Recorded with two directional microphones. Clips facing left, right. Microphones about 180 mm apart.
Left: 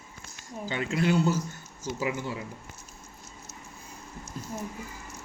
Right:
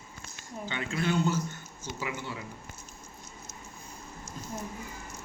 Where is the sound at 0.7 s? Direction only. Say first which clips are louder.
Left 4 dB; 40° left (ahead or behind).